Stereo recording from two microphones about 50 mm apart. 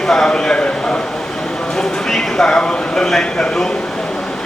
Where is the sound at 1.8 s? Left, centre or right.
Centre.